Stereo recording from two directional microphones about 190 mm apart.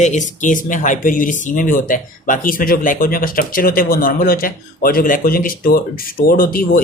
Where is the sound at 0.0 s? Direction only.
40° left (ahead or behind).